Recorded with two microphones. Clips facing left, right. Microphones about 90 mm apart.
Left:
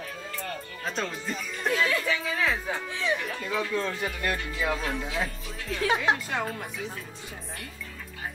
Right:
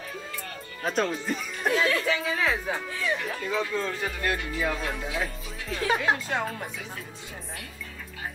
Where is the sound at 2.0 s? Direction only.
5° right (ahead or behind).